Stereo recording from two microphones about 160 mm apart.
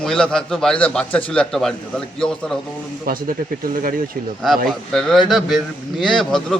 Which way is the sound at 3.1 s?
60° right (ahead or behind).